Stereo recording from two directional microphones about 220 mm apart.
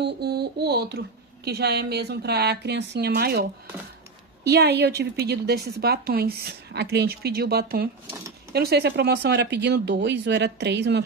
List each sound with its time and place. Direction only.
0.0 s speech: 50° right (ahead or behind)
4.5 s speech: 50° right (ahead or behind)